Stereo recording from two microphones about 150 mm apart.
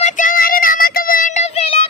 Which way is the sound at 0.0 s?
55° left (ahead or behind).